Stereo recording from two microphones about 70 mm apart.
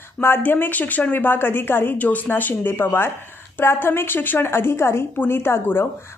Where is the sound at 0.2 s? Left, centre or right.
Left.